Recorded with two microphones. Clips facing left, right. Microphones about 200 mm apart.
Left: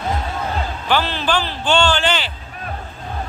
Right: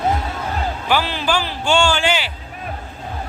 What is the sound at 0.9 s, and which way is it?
Speech, 10° right (ahead or behind).